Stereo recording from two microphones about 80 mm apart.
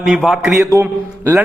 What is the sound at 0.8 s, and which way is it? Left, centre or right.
Speech, right.